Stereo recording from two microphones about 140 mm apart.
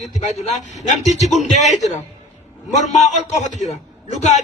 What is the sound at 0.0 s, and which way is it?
A man's voice, 60° left (ahead or behind).